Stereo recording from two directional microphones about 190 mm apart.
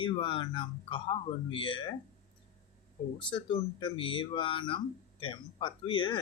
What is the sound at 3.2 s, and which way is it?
Speech, 25° left (ahead or behind).